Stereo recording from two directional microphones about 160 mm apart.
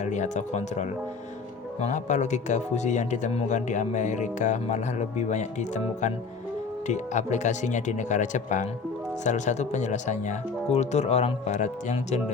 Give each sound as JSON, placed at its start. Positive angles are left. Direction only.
{"t": 0.0, "sound": "speech", "side_deg": 45}